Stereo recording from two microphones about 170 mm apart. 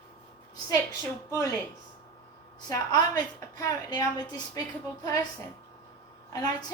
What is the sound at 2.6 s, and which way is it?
A woman's voice, 25° left (ahead or behind).